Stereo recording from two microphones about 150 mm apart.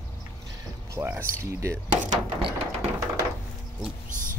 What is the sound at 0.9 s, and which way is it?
Speech, 15° right (ahead or behind).